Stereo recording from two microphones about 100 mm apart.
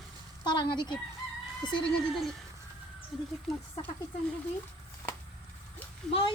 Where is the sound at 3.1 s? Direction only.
5° right (ahead or behind).